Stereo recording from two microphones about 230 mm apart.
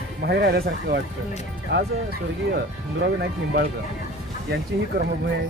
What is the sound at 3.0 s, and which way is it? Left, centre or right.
Speech, right.